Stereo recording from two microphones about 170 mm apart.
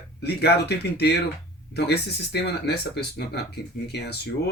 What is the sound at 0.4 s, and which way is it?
Speech, 75° left (ahead or behind).